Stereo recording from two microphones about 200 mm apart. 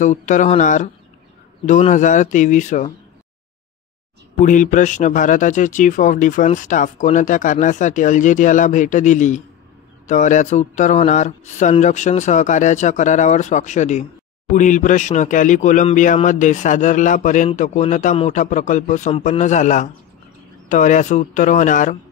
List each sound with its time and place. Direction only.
0.0 s speech: 40° left (ahead or behind)
4.4 s speech: 40° left (ahead or behind)